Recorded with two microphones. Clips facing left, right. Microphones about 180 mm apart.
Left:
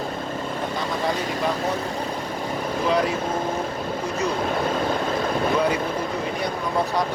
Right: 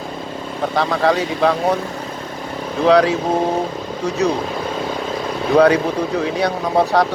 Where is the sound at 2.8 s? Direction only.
75° right (ahead or behind).